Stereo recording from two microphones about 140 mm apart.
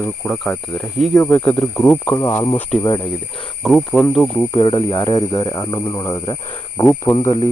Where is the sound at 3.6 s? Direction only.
Centre (ahead or behind).